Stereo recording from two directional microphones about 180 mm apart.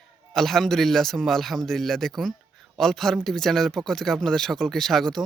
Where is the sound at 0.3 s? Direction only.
Centre (ahead or behind).